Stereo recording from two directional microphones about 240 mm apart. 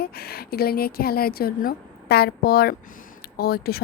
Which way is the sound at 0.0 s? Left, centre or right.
Left.